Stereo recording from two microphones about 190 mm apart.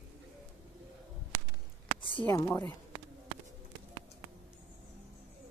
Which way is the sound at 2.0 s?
25° left (ahead or behind).